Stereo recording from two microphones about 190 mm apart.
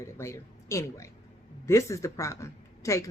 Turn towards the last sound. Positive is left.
turn(degrees=15)  # may be behind; listen again after turning